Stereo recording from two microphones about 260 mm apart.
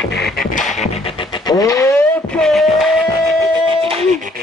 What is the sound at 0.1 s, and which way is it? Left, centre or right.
Music, left.